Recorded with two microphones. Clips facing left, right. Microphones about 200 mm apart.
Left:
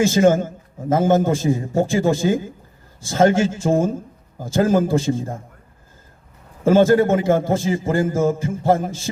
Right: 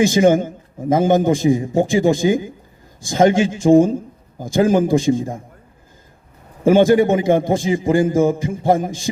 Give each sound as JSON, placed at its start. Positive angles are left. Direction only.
{"t": 0.0, "sound": "a man's voice", "side_deg": -15}
{"t": 6.7, "sound": "a man's voice", "side_deg": -15}